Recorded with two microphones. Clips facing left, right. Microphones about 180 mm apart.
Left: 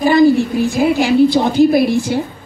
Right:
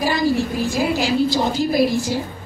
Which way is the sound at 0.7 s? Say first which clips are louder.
Left 7 dB; 60° left (ahead or behind).